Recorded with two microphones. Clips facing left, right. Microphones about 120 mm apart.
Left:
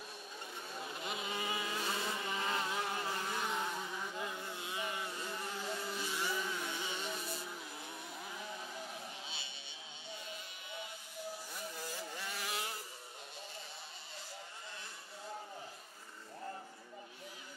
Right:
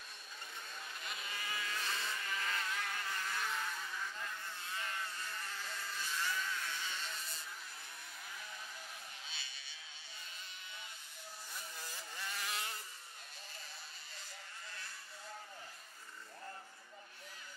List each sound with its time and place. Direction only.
0.7 s vehicle: 20° left (ahead or behind)
8.3 s vehicle: 25° left (ahead or behind)
11.5 s vehicle: 15° left (ahead or behind)